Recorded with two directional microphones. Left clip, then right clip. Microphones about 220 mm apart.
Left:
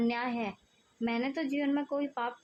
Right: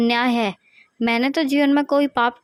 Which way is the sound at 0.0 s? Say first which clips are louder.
Right 13 dB; 45° right (ahead or behind).